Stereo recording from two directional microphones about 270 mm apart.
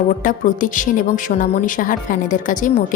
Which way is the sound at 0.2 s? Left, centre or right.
Left.